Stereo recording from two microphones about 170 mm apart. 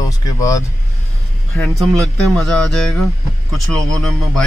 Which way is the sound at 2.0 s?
Centre (ahead or behind).